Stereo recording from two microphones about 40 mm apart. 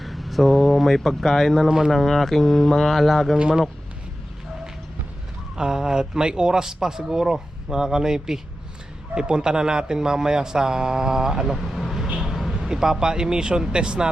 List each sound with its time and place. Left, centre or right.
0.0 s speech: centre
1.6 s a man's voice: centre
1.9 s speech: centre
5.5 s a man's voice: centre
11.7 s vehicle: centre
12.2 s a sound: centre
12.6 s a man's voice: centre